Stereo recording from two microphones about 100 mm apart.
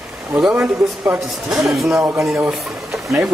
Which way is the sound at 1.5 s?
Centre (ahead or behind).